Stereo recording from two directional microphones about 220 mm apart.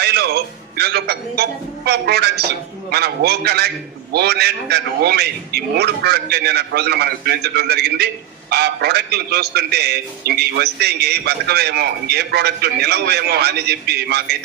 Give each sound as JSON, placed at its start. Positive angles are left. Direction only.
{"t": 0.0, "sound": "a man's voice", "side_deg": -45}